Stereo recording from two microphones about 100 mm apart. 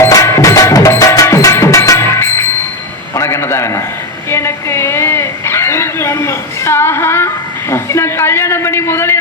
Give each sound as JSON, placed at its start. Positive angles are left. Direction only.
{"t": 0.1, "sound": "music", "side_deg": 30}
{"t": 3.2, "sound": "a sound", "side_deg": 30}
{"t": 7.7, "sound": "a man's voice", "side_deg": 25}